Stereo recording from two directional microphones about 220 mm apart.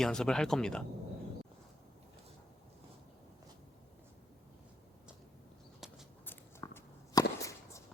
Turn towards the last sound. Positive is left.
turn(degrees=15)  # may be behind; listen again after turning